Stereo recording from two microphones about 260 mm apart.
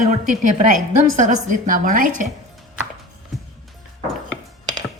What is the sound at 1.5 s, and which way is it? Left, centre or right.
Speech, right.